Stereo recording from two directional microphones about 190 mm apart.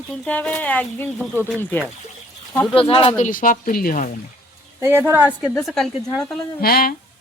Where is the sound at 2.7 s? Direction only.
30° left (ahead or behind).